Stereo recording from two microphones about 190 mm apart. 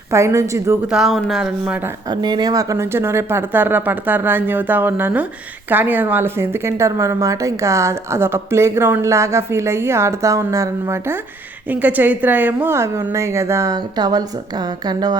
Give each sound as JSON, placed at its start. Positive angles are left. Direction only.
{"t": 0.1, "sound": "a woman's voice", "side_deg": -15}
{"t": 0.9, "sound": "speech", "side_deg": 0}
{"t": 2.0, "sound": "a woman's voice", "side_deg": -20}
{"t": 14.8, "sound": "a sound", "side_deg": -20}